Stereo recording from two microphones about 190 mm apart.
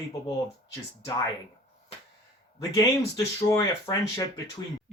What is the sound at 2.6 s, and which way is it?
Speech, 15° left (ahead or behind).